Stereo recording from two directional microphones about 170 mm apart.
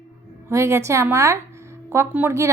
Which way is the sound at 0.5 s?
15° right (ahead or behind).